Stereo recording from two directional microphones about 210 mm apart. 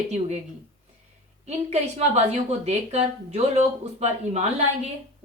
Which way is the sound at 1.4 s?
30° right (ahead or behind).